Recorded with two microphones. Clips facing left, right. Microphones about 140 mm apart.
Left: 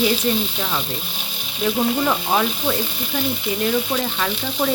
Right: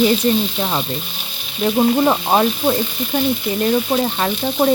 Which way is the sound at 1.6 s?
35° right (ahead or behind).